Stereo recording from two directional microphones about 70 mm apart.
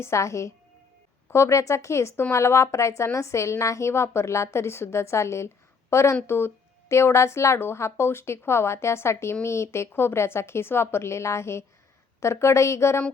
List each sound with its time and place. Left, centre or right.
0.0 s a woman's voice: left